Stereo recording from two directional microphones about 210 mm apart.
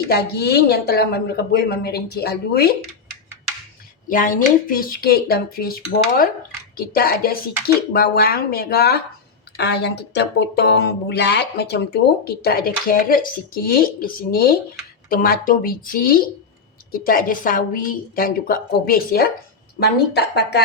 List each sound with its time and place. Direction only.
0.1 s speech: 50° left (ahead or behind)
4.1 s speech: 40° left (ahead or behind)